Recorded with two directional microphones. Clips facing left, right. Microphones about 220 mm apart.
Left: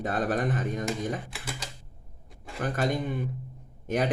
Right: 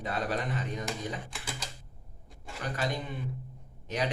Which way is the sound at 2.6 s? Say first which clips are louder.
Left 6 dB; 50° left (ahead or behind).